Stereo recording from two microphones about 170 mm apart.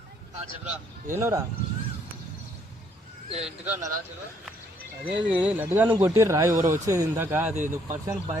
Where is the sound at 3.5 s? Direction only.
10° right (ahead or behind).